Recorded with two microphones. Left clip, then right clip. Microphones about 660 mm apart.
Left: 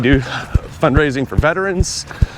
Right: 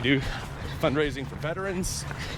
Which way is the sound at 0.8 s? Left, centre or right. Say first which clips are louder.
Left 11 dB; left.